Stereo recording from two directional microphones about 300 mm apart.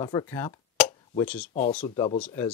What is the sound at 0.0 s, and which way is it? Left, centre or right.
Speech, centre.